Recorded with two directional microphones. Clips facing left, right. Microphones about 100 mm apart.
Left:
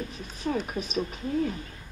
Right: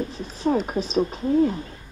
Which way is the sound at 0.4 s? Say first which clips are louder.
Right 7 dB; 30° right (ahead or behind).